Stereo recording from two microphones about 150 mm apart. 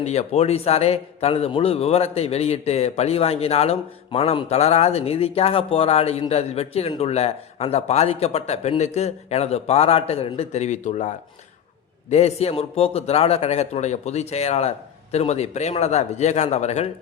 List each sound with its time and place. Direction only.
0.0 s a man's voice: 45° left (ahead or behind)
12.1 s a man's voice: 45° left (ahead or behind)